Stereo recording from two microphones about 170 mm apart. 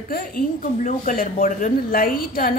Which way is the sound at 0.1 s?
55° left (ahead or behind).